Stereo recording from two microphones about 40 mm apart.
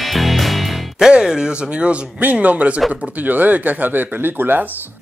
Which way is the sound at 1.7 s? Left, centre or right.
Right.